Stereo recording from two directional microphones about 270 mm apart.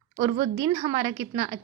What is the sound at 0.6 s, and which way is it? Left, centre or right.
Speech, centre.